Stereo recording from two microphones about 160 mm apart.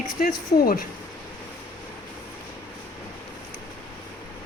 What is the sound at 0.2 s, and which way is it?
Speech, 65° left (ahead or behind).